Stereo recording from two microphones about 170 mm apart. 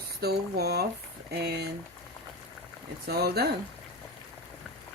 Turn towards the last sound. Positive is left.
turn(degrees=-70)  # may be behind; listen again after turning